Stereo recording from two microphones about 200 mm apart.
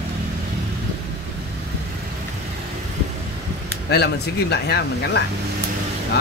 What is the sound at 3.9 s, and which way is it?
Speech, 55° left (ahead or behind).